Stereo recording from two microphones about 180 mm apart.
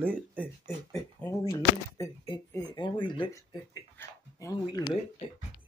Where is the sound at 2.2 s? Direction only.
25° left (ahead or behind).